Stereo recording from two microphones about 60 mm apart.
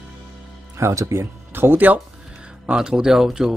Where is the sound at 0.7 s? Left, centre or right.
Right.